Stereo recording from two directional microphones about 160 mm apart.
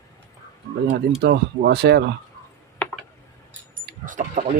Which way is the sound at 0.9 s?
90° right.